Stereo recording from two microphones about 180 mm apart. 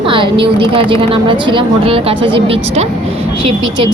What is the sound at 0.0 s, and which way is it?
A woman's voice, 30° right (ahead or behind).